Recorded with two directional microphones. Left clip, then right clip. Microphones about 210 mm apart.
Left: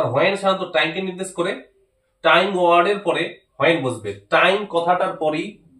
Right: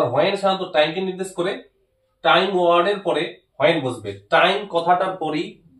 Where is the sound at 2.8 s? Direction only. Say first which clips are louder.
Left 1 dB; 15° left (ahead or behind).